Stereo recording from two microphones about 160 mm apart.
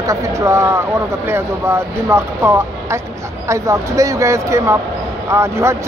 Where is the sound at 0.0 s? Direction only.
20° right (ahead or behind).